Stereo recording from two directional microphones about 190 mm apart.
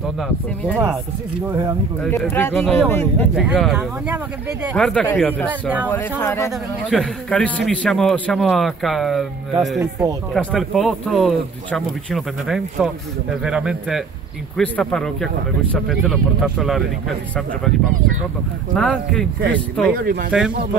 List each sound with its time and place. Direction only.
2.0 s speech: 10° left (ahead or behind)
3.3 s speech: 5° right (ahead or behind)
5.5 s speech: 10° right (ahead or behind)
5.9 s speech: 10° left (ahead or behind)
6.9 s speech: 5° left (ahead or behind)
9.8 s speech: 20° right (ahead or behind)
10.3 s speech: centre (ahead or behind)
18.8 s speech: 5° left (ahead or behind)
19.9 s speech: 50° right (ahead or behind)
20.2 s speech: 5° right (ahead or behind)